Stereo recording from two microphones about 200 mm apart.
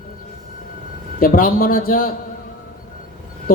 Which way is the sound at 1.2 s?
45° left (ahead or behind).